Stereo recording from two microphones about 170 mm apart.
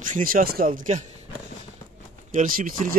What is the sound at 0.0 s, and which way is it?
Speech, 55° right (ahead or behind).